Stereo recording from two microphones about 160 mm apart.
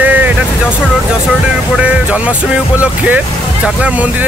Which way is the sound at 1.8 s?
10° right (ahead or behind).